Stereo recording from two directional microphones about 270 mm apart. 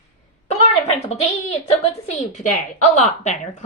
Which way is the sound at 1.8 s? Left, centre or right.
Left.